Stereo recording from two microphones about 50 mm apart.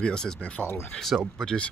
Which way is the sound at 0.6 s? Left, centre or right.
Left.